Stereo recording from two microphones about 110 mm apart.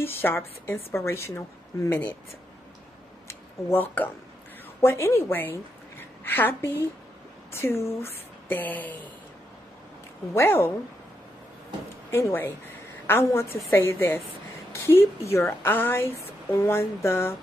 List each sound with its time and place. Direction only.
0.0 s a woman's voice: 20° left (ahead or behind)
3.3 s a woman's voice: 20° left (ahead or behind)
10.3 s a woman's voice: 20° left (ahead or behind)
12.1 s a woman's voice: 25° left (ahead or behind)